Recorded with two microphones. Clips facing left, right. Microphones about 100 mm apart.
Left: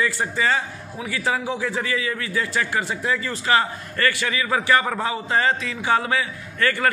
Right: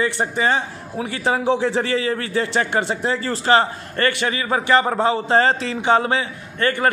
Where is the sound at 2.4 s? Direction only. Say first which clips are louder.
Right 3 dB; 30° right (ahead or behind).